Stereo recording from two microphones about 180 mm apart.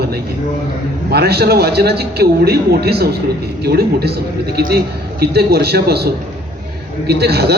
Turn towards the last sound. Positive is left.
turn(degrees=-60)  # may be behind; listen again after turning